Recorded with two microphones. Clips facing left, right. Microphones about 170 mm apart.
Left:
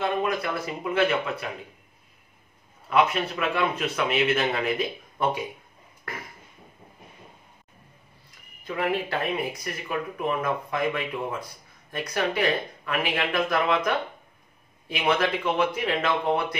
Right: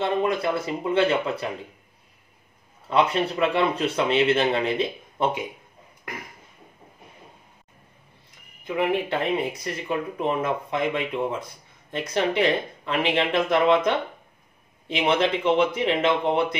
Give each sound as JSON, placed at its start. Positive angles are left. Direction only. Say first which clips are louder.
{"t": 0.0, "sound": "speech", "louder": "right 3 dB", "side_deg": -30}
{"t": 2.9, "sound": "speech", "louder": "right 1 dB", "side_deg": -30}
{"t": 8.6, "sound": "speech", "louder": "right 3 dB", "side_deg": -15}